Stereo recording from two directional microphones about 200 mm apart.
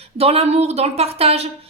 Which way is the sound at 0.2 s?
30° right (ahead or behind).